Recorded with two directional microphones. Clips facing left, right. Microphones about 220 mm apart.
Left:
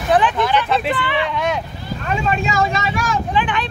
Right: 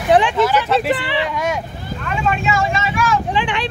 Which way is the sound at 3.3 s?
30° right (ahead or behind).